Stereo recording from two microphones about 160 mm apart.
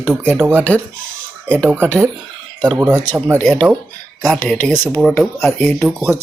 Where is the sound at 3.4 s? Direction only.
Centre (ahead or behind).